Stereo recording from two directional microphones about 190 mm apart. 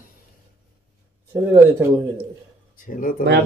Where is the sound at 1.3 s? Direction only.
10° right (ahead or behind).